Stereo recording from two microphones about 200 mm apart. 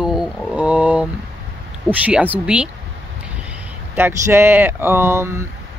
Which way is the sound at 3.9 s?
10° right (ahead or behind).